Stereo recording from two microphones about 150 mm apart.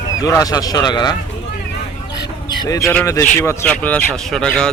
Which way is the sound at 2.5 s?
20° left (ahead or behind).